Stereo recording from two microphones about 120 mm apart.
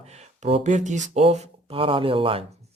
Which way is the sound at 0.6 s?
90° right.